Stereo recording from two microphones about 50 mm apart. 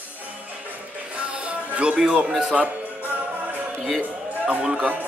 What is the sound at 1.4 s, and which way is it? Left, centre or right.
Music, right.